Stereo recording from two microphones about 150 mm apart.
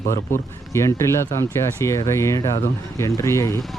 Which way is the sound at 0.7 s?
20° left (ahead or behind).